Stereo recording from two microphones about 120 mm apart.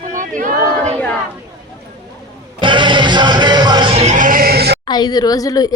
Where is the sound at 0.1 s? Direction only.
90° right.